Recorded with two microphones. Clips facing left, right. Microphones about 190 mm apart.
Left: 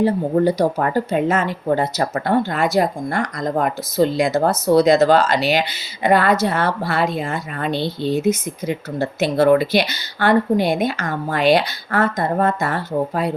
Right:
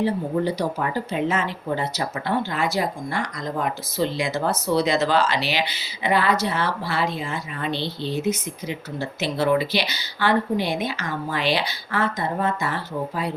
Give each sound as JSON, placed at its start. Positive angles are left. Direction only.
{"t": 0.0, "sound": "speech", "side_deg": 50}